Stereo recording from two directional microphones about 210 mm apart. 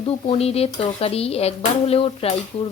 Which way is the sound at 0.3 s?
30° left (ahead or behind).